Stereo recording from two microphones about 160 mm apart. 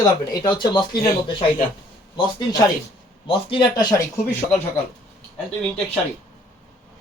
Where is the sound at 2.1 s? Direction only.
25° left (ahead or behind).